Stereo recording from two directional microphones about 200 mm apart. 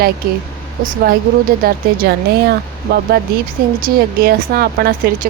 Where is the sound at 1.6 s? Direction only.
50° right (ahead or behind).